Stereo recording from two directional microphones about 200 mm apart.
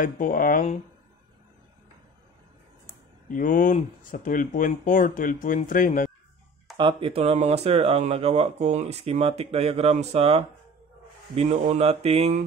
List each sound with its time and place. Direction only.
0.0 s speech: 40° left (ahead or behind)
3.3 s speech: 40° left (ahead or behind)
6.8 s speech: 25° right (ahead or behind)